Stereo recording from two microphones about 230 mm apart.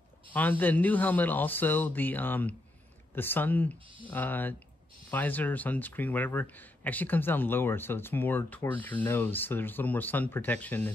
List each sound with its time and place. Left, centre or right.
0.3 s speech: centre